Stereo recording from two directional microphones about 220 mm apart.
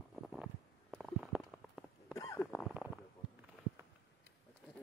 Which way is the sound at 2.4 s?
Centre (ahead or behind).